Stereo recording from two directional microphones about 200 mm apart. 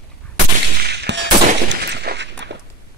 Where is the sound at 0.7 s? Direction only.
55° right (ahead or behind).